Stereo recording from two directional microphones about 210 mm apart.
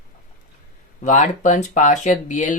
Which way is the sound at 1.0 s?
35° left (ahead or behind).